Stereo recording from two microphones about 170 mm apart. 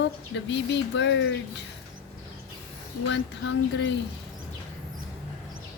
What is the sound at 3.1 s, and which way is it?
Speech, 90° left.